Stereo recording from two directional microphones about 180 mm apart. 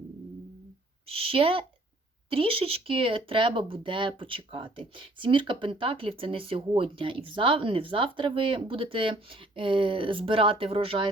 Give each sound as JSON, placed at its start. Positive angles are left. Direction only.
{"t": 1.0, "sound": "a woman's voice", "side_deg": -30}